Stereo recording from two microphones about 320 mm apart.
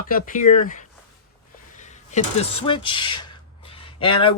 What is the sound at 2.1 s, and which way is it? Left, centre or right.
Speech, centre.